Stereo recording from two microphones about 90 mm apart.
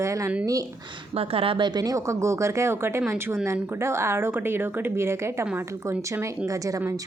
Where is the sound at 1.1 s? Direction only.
90° right; by 3.6 s 20° right (ahead or behind).